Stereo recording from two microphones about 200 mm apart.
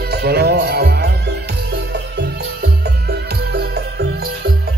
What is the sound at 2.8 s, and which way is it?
Music, 55° right (ahead or behind).